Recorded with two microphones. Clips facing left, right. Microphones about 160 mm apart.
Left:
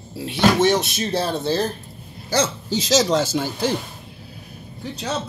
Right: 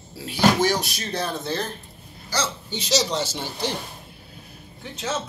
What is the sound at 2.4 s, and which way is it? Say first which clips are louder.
Speech: left 7 dB; 90° left.